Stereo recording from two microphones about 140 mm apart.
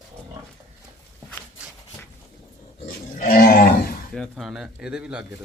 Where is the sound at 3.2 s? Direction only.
90° left.